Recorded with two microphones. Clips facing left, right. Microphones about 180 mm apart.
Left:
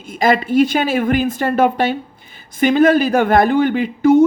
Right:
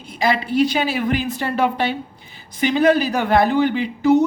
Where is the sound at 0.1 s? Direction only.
45° left (ahead or behind).